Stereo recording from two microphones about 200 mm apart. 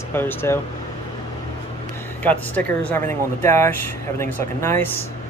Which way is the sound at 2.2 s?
10° left (ahead or behind).